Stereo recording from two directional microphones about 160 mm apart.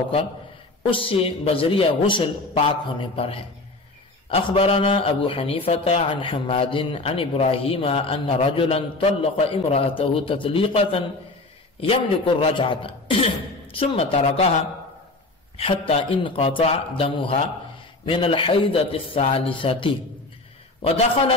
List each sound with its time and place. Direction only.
0.8 s a man's voice: 35° left (ahead or behind)
15.5 s a man's voice: 35° left (ahead or behind)